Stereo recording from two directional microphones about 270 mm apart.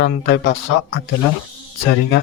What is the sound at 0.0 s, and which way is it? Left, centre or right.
Speech, left.